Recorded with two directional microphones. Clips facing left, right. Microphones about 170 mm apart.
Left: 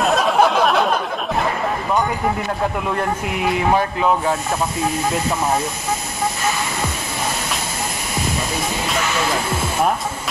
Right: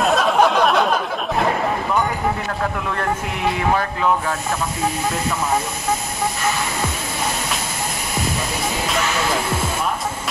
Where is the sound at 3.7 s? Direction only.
20° left (ahead or behind).